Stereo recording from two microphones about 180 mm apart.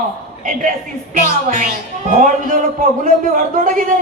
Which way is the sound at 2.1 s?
45° right (ahead or behind).